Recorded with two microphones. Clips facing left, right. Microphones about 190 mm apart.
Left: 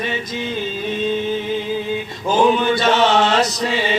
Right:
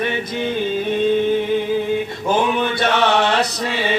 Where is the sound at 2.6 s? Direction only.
60° right (ahead or behind).